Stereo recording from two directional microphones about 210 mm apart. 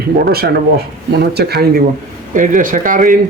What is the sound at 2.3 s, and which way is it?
Speech, 40° right (ahead or behind).